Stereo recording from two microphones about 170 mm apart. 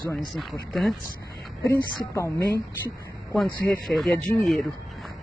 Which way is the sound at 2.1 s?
15° left (ahead or behind).